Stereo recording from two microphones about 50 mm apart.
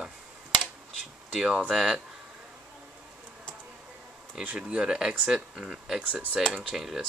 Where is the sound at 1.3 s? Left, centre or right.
Centre.